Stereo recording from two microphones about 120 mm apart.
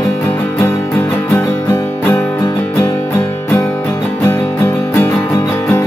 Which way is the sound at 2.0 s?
15° left (ahead or behind).